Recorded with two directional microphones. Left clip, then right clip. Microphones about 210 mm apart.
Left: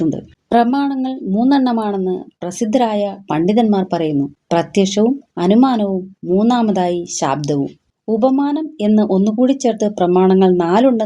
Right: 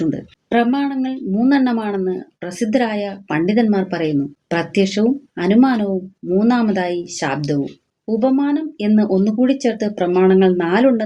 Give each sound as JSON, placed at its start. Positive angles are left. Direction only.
{"t": 0.5, "sound": "speech", "side_deg": 40}